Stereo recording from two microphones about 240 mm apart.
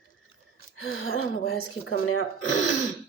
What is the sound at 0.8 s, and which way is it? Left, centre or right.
Speech, left.